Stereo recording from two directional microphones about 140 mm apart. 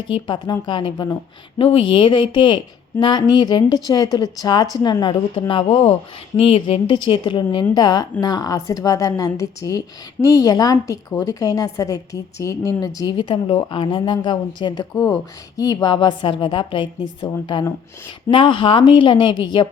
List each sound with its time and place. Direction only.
0.1 s a woman's voice: 35° left (ahead or behind)
1.5 s a woman's voice: 40° left (ahead or behind); by 12.9 s 25° left (ahead or behind)
13.0 s a woman's voice: 35° left (ahead or behind)